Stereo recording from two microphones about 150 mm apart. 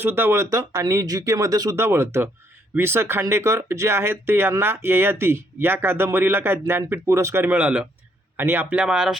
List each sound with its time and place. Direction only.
0.0 s speech: 15° right (ahead or behind)